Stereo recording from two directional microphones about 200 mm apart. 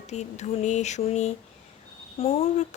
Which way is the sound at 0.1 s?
35° left (ahead or behind).